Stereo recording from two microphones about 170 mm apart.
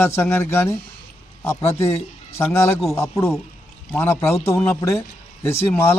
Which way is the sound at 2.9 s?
15° left (ahead or behind).